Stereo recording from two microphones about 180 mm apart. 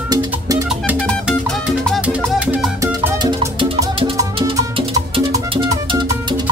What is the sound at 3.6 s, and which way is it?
Music, 30° right (ahead or behind).